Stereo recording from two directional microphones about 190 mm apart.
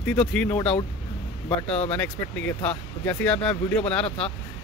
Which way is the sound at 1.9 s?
5° left (ahead or behind).